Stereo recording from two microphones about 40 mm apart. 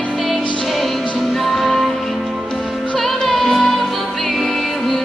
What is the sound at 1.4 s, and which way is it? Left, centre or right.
Music, centre.